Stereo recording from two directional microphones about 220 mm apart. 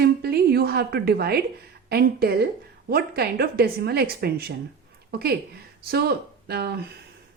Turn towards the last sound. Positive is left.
turn(degrees=-45)  # may be behind; listen again after turning